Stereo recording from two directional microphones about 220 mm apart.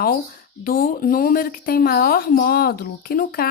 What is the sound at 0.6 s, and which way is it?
A woman's voice, 40° left (ahead or behind).